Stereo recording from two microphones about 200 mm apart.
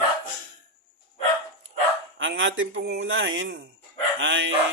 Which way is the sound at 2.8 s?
60° right (ahead or behind).